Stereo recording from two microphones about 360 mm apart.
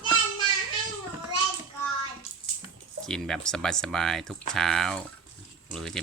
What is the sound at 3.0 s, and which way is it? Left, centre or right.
Speech, centre.